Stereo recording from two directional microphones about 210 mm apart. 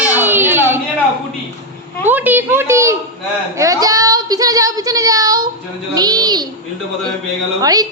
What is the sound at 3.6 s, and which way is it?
Child singing, 15° right (ahead or behind).